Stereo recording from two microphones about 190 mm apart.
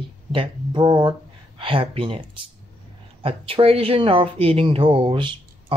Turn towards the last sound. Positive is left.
turn(degrees=-25)  # may be behind; listen again after turning